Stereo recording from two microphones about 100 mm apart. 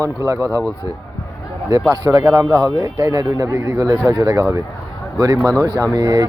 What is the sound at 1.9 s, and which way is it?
A man's voice, 25° right (ahead or behind).